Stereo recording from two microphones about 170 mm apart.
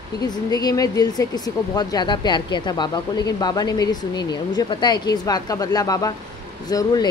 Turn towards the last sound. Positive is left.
turn(degrees=20)  # may be behind; listen again after turning